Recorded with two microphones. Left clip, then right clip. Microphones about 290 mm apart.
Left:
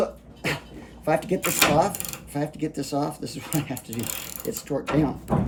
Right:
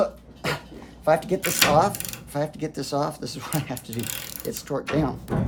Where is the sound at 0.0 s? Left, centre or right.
Centre.